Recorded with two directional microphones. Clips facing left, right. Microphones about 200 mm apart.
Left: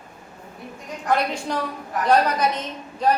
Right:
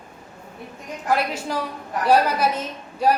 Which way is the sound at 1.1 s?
5° right (ahead or behind).